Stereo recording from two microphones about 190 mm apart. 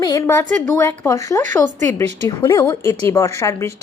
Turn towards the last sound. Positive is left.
turn(degrees=15)  # may be behind; listen again after turning